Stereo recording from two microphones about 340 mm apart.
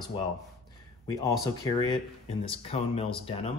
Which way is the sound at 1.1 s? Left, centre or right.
Centre.